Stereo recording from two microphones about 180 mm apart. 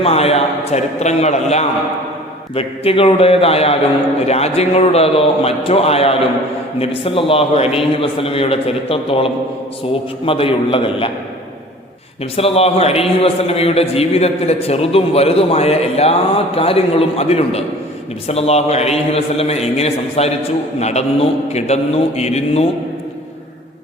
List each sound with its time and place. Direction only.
0.0 s a man's voice: 35° left (ahead or behind)
12.4 s a man's voice: 35° left (ahead or behind)